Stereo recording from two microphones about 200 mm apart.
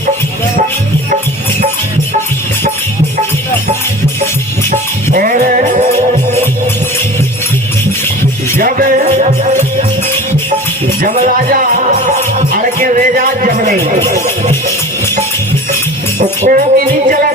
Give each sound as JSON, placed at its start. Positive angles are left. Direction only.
{"t": 4.7, "sound": "music", "side_deg": -45}
{"t": 8.5, "sound": "music", "side_deg": -45}
{"t": 11.1, "sound": "music", "side_deg": -30}
{"t": 16.4, "sound": "music", "side_deg": -40}